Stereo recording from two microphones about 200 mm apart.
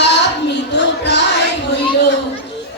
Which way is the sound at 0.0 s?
60° left (ahead or behind).